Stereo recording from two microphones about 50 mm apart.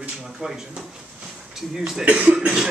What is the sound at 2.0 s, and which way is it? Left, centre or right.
Speech, right.